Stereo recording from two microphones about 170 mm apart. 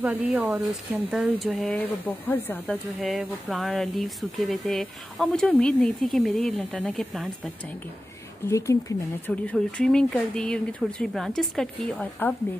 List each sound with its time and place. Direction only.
0.0 s speech: 10° right (ahead or behind)
1.8 s speech: 10° left (ahead or behind)
8.5 s speech: 20° left (ahead or behind)
9.3 s speech: 5° left (ahead or behind)